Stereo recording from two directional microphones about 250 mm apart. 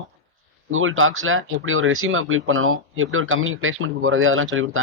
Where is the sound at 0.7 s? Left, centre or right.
Right.